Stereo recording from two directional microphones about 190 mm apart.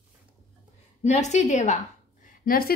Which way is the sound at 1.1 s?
40° left (ahead or behind).